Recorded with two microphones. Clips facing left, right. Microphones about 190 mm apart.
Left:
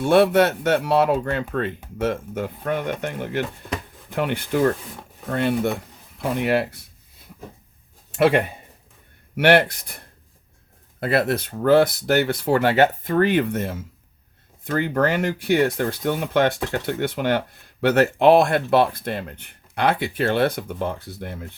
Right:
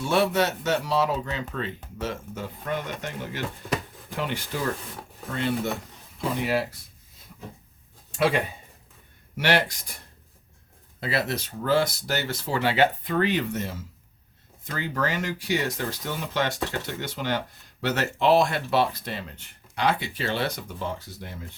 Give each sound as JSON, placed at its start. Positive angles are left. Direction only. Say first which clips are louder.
{"t": 0.0, "sound": "speech", "louder": "left 7 dB", "side_deg": 55}
{"t": 8.1, "sound": "speech", "louder": "left 6 dB", "side_deg": 60}
{"t": 9.4, "sound": "speech", "louder": "left 8 dB", "side_deg": 60}
{"t": 11.0, "sound": "speech", "louder": "left 7 dB", "side_deg": 55}